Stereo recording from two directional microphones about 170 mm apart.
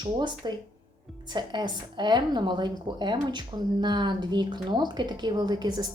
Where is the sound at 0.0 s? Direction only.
25° right (ahead or behind).